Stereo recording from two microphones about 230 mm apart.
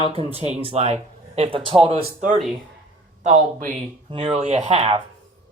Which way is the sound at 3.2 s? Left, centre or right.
Right.